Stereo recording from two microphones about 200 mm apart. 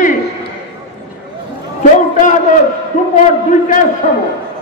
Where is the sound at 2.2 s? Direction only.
40° left (ahead or behind).